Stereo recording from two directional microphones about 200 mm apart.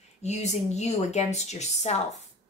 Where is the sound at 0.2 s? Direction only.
35° left (ahead or behind).